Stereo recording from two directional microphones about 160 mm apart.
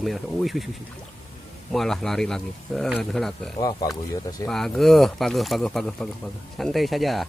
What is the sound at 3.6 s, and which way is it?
Speech, 25° left (ahead or behind).